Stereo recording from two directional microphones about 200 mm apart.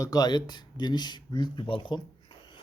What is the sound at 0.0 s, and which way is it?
Speech, 20° left (ahead or behind).